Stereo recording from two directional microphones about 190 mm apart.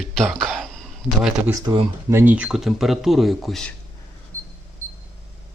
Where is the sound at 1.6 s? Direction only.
20° right (ahead or behind).